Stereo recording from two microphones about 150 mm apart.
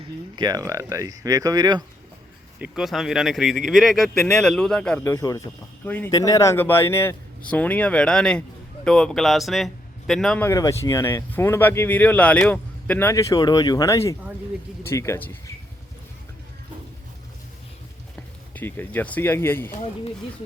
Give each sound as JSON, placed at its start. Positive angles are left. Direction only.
{"t": 0.3, "sound": "speech", "side_deg": -25}
{"t": 2.6, "sound": "speech", "side_deg": -5}
{"t": 5.0, "sound": "speech", "side_deg": 20}
{"t": 6.1, "sound": "speech", "side_deg": 25}
{"t": 10.4, "sound": "speech", "side_deg": 20}
{"t": 18.5, "sound": "speech", "side_deg": 15}